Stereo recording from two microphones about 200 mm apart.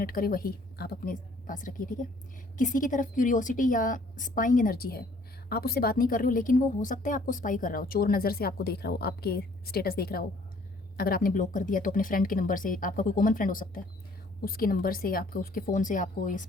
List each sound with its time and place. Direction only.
0.0 s a woman's voice: 45° left (ahead or behind)